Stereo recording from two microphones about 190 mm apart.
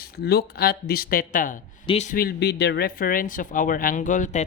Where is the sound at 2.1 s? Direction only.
55° left (ahead or behind).